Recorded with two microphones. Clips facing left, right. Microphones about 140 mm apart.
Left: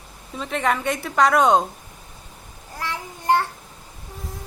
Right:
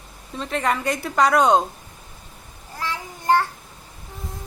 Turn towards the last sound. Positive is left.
turn(degrees=20)  # may be behind; listen again after turning